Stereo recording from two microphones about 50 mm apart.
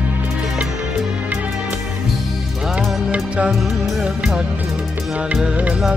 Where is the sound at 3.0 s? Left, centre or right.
Right.